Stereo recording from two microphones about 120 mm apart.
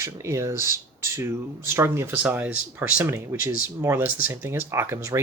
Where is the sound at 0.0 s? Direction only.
25° right (ahead or behind).